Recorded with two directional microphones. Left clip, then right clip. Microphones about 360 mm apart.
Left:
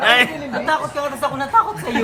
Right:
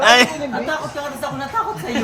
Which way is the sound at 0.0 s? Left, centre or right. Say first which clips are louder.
Right 2 dB; centre.